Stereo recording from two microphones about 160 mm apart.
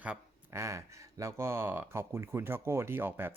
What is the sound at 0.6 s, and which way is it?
Speech, 20° right (ahead or behind).